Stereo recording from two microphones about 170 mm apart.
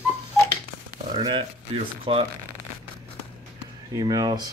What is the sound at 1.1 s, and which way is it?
Speech, 25° right (ahead or behind).